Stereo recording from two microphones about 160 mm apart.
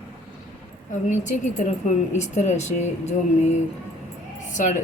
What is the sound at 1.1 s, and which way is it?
Speech, 50° left (ahead or behind).